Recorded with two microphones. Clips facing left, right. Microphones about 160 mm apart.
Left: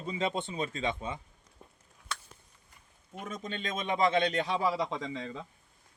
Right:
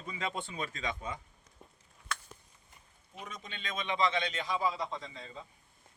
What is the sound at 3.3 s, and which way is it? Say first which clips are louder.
A man's voice: left 7 dB; 45° left (ahead or behind).